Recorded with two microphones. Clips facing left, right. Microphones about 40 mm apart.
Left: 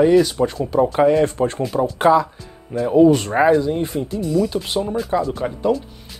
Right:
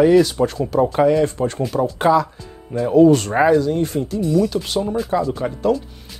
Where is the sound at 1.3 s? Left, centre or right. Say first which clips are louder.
Left 1 dB; left.